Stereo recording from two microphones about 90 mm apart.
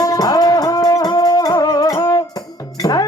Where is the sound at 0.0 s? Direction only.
45° left (ahead or behind).